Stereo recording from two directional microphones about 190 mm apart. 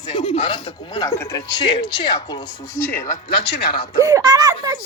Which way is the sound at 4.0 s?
20° right (ahead or behind).